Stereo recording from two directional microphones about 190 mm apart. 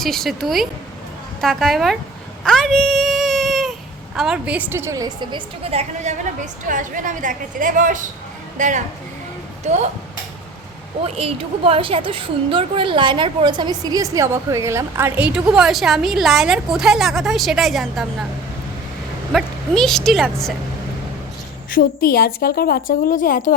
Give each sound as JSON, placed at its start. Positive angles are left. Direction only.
{"t": 0.0, "sound": "a woman's voice", "side_deg": 0}
{"t": 11.0, "sound": "a woman's voice", "side_deg": -30}
{"t": 19.3, "sound": "a woman's voice", "side_deg": 0}
{"t": 21.7, "sound": "a woman's voice", "side_deg": 50}